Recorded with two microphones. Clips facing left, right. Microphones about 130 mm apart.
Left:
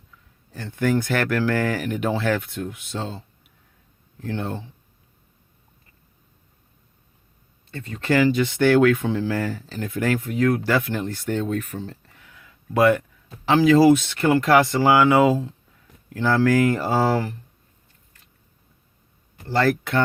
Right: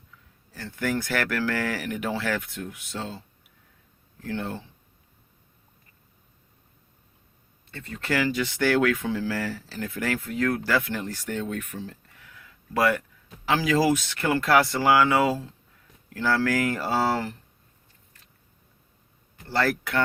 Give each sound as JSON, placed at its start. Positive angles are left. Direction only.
{"t": 0.5, "sound": "speech", "side_deg": 20}
{"t": 4.3, "sound": "speech", "side_deg": 20}
{"t": 7.9, "sound": "speech", "side_deg": 25}
{"t": 12.3, "sound": "a sound", "side_deg": 20}
{"t": 13.4, "sound": "speech", "side_deg": 25}
{"t": 19.5, "sound": "speech", "side_deg": 25}